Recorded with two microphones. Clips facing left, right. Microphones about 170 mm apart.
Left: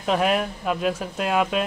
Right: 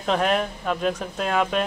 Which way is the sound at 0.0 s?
5° left (ahead or behind).